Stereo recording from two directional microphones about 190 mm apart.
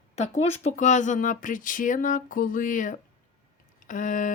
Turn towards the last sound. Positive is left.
turn(degrees=45)  # may be behind; listen again after turning